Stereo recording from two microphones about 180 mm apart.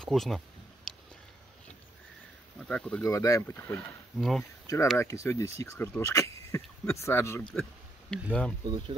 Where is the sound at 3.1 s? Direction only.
20° left (ahead or behind).